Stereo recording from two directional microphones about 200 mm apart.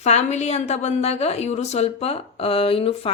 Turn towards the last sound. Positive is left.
turn(degrees=30)  # may be behind; listen again after turning